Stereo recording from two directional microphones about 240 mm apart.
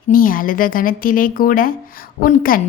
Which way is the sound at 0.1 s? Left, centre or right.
Left.